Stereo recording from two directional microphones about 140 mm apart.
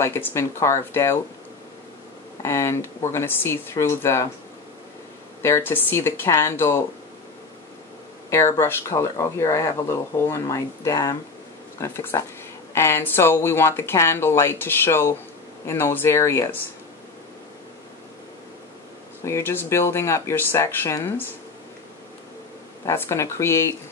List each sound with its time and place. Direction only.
0.0 s speech: 20° left (ahead or behind)
2.4 s speech: 20° left (ahead or behind)
5.4 s speech: 15° left (ahead or behind)
8.3 s speech: 20° left (ahead or behind)
19.2 s speech: 20° left (ahead or behind)
22.8 s speech: 20° left (ahead or behind)